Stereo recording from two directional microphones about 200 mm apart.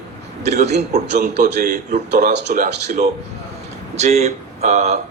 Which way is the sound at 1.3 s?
55° right (ahead or behind).